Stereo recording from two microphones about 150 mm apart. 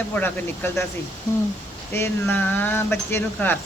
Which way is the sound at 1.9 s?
15° left (ahead or behind).